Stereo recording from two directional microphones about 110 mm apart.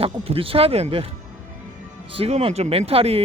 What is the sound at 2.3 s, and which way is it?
Speech, 75° right (ahead or behind).